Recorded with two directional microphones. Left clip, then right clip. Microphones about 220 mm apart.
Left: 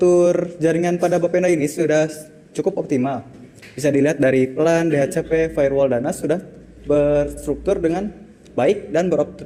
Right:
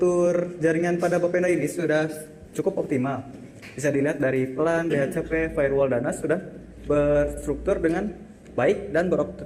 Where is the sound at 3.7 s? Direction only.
50° left (ahead or behind).